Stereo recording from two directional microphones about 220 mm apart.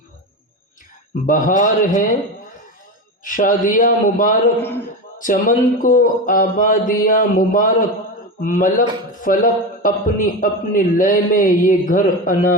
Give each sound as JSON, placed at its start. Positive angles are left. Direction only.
{"t": 1.3, "sound": "a man's voice", "side_deg": 35}
{"t": 3.2, "sound": "a man's voice", "side_deg": 35}
{"t": 4.5, "sound": "speech", "side_deg": 10}
{"t": 5.1, "sound": "a man's voice", "side_deg": 35}